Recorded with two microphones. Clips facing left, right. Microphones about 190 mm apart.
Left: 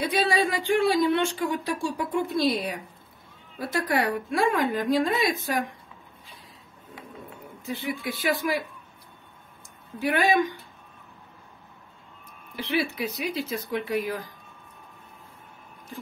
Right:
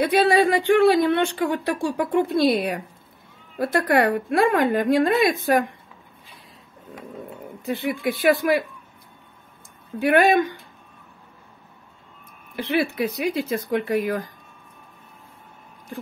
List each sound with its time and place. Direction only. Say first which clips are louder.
0.0 s speech: right 7 dB; 60° right (ahead or behind)
7.6 s speech: right 6 dB; 60° right (ahead or behind)
9.9 s speech: right 6 dB; 55° right (ahead or behind)
12.5 s speech: right 5 dB; 55° right (ahead or behind)